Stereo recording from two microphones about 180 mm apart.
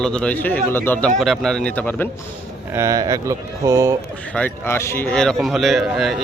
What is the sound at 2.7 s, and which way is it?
Speech, 20° right (ahead or behind).